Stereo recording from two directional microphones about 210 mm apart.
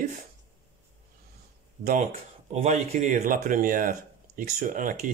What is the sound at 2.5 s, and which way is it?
Speech, 30° right (ahead or behind).